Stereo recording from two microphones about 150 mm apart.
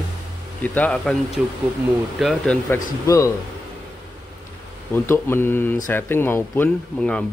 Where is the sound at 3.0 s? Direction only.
20° left (ahead or behind).